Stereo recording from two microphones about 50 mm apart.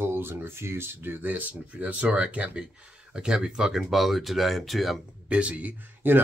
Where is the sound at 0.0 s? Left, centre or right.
Right.